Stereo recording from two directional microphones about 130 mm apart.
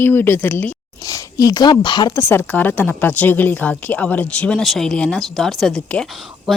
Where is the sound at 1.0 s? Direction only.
25° left (ahead or behind).